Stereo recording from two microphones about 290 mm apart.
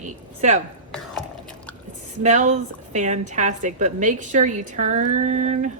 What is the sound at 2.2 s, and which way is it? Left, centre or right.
A woman's voice, right.